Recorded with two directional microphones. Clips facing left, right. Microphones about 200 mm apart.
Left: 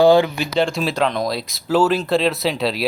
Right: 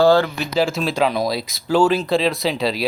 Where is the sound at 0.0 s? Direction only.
15° left (ahead or behind).